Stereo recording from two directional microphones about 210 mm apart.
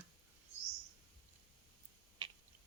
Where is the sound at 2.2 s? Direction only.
20° right (ahead or behind).